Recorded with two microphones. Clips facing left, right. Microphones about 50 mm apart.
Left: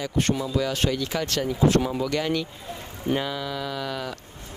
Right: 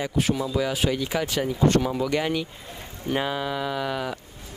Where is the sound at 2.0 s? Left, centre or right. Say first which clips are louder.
Right 1 dB; centre.